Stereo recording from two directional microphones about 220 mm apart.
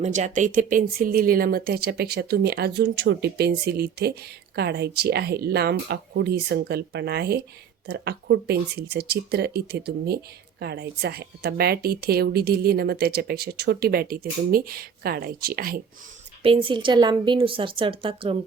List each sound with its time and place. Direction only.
0.0 s speech: 35° right (ahead or behind)
16.4 s a woman's voice: 25° right (ahead or behind)